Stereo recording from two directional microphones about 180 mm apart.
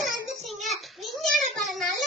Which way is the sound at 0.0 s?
Centre (ahead or behind).